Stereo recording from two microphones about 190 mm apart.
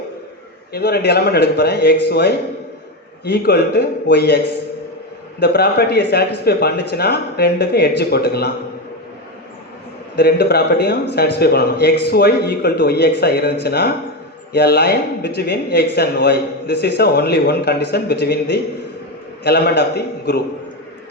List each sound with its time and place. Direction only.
0.7 s a man's voice: 55° left (ahead or behind)
5.4 s a man's voice: 60° left (ahead or behind)
10.2 s a man's voice: 60° left (ahead or behind)